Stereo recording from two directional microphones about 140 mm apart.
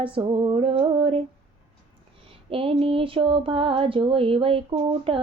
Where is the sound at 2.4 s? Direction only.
40° right (ahead or behind).